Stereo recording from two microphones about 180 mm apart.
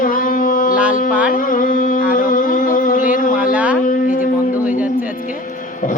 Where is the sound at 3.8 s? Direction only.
45° left (ahead or behind).